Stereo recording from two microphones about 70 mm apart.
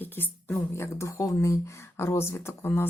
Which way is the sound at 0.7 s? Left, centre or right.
Left.